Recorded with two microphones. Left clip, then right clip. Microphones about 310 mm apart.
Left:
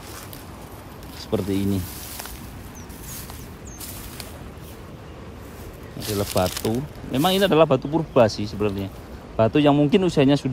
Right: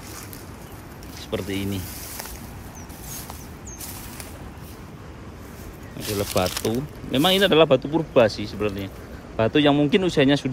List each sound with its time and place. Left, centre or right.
1.3 s speech: centre
5.9 s speech: centre